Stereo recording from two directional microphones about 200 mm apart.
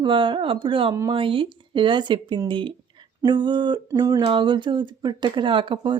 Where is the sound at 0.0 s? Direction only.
25° right (ahead or behind).